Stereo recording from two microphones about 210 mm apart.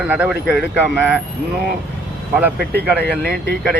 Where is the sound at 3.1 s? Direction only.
5° left (ahead or behind).